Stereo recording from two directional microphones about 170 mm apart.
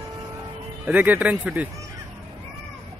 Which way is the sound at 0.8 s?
10° right (ahead or behind).